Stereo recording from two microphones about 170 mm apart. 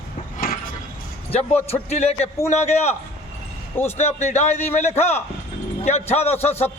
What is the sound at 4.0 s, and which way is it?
Speech, 40° left (ahead or behind).